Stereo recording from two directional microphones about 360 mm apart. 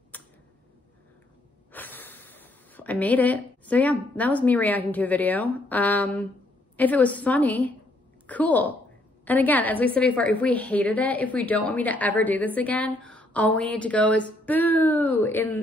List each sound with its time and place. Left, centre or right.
0.1 s tick-tock: centre
1.7 s a woman's voice: centre